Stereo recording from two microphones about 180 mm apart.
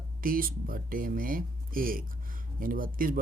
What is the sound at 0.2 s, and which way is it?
Speech, 50° right (ahead or behind).